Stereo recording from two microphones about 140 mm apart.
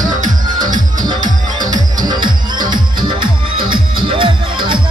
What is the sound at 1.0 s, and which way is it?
Music, 30° right (ahead or behind).